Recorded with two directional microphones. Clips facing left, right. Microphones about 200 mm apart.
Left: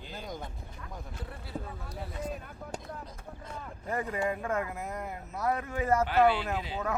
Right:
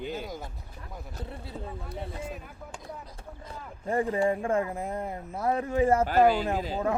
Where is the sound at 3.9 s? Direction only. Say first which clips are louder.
Right 6 dB; 30° right (ahead or behind).